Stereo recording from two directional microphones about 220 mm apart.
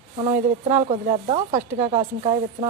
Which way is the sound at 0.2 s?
30° right (ahead or behind).